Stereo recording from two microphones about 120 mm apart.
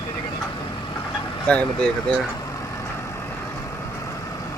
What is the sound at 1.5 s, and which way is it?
Speech, 10° left (ahead or behind).